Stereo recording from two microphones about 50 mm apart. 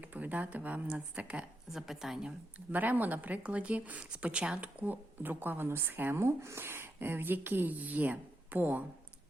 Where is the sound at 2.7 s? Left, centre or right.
Right.